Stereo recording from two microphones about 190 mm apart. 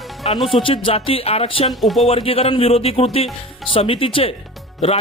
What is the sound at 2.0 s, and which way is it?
A man's voice, 30° left (ahead or behind).